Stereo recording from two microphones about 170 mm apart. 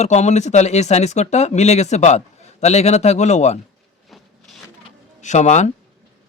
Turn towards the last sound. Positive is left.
turn(degrees=45)  # may be behind; listen again after turning